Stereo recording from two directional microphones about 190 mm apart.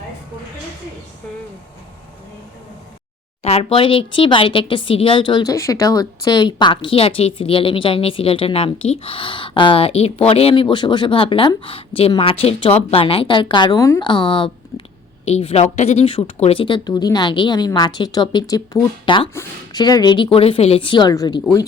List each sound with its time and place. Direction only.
3.4 s speech: 30° left (ahead or behind)